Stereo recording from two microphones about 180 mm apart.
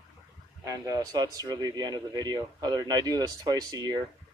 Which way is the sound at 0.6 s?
20° right (ahead or behind).